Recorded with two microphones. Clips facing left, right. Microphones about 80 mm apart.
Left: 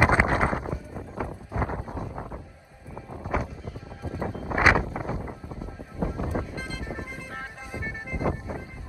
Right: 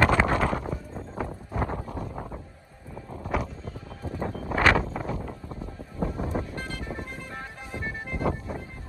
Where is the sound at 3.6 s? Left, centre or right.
Centre.